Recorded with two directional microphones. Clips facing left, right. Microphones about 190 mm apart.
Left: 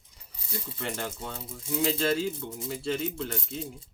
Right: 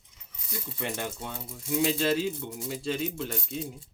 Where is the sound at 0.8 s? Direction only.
20° right (ahead or behind).